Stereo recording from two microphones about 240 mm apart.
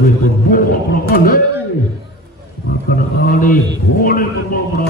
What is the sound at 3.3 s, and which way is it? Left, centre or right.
A man's voice, left.